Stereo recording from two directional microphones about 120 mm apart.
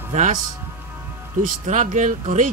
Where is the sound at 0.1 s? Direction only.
85° right.